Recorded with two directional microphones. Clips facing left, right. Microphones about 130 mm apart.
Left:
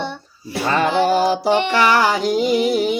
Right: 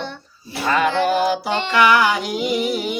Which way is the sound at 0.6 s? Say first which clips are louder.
Left 1 dB; 30° left (ahead or behind).